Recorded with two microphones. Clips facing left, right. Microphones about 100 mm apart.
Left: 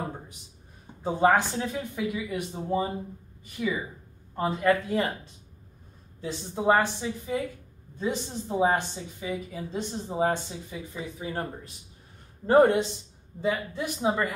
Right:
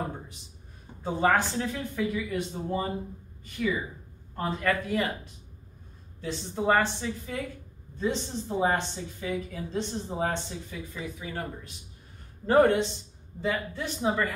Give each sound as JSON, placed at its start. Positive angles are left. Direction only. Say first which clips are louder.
{"t": 1.0, "sound": "a woman's voice", "louder": "left 2 dB", "side_deg": 15}
{"t": 6.2, "sound": "a woman's voice", "louder": "left 2 dB", "side_deg": 15}
{"t": 11.1, "sound": "speech", "louder": "left 6 dB", "side_deg": 35}
{"t": 13.4, "sound": "a woman's voice", "louder": "left 2 dB", "side_deg": 15}